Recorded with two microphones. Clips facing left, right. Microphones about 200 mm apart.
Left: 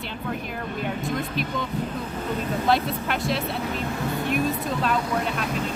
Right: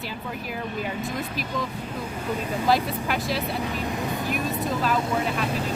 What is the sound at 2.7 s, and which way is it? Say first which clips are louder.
Speech: right 1 dB; centre (ahead or behind).